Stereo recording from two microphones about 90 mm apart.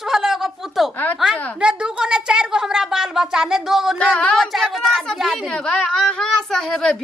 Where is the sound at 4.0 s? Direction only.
10° left (ahead or behind).